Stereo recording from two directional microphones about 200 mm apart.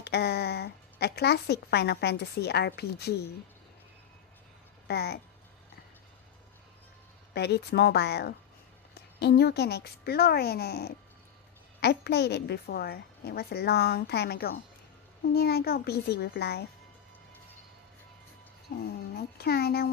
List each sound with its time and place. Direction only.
0.0 s a woman's voice: 55° left (ahead or behind)
4.8 s speech: 55° left (ahead or behind)
7.3 s a woman's voice: 55° left (ahead or behind)
18.8 s a woman's voice: 50° left (ahead or behind)